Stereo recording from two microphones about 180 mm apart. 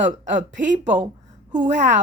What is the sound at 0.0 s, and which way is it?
A woman's voice, 45° right (ahead or behind).